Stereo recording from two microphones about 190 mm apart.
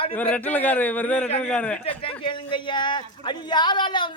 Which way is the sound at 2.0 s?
25° left (ahead or behind).